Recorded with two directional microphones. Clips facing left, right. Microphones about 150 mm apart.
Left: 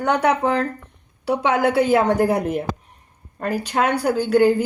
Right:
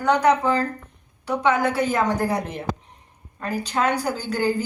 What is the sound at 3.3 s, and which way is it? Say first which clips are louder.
Speech: left 3 dB; 55° left (ahead or behind).